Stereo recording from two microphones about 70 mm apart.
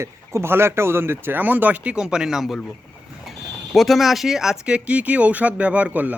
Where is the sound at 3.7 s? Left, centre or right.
Centre; by 6.2 s right.